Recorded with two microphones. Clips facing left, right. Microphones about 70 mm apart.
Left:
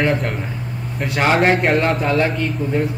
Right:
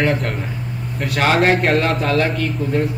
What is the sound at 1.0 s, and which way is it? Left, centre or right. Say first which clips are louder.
A man's voice: even; centre.